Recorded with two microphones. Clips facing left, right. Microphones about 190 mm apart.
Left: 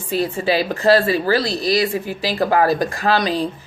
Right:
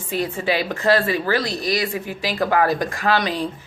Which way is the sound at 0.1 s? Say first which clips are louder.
Left 3 dB; 35° left (ahead or behind).